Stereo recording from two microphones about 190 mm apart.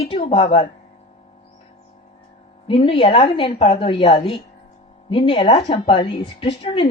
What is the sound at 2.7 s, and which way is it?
A woman's voice, 30° left (ahead or behind).